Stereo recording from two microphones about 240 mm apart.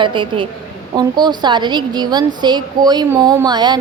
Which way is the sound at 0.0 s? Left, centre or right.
Centre.